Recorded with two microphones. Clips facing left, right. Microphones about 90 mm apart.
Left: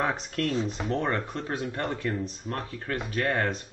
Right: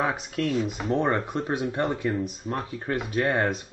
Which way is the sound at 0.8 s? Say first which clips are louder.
Right 4 dB; 20° right (ahead or behind).